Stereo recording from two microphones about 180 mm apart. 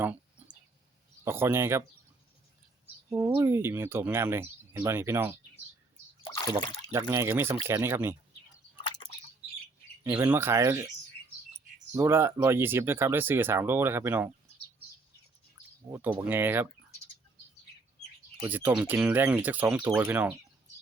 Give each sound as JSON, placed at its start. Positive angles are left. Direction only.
{"t": 0.4, "sound": "a sound", "side_deg": -10}
{"t": 1.2, "sound": "speech", "side_deg": -15}
{"t": 3.1, "sound": "speech", "side_deg": -20}
{"t": 7.1, "sound": "speech", "side_deg": -15}
{"t": 8.8, "sound": "a sound", "side_deg": 30}
{"t": 10.0, "sound": "speech", "side_deg": -10}
{"t": 11.9, "sound": "speech", "side_deg": -15}
{"t": 15.9, "sound": "speech", "side_deg": -10}
{"t": 18.4, "sound": "speech", "side_deg": -10}